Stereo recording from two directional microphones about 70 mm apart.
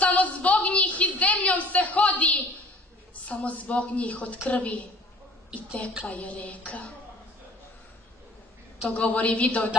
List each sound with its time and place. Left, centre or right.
0.0 s a sound: left
3.3 s a woman's voice: centre
6.0 s a woman's voice: centre
8.8 s a woman's voice: centre